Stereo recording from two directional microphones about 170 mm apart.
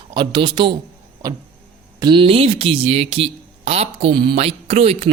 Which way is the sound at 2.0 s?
30° right (ahead or behind).